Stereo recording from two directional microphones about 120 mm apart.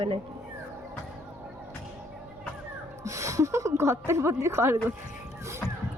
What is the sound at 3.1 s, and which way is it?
A woman's voice, 25° right (ahead or behind).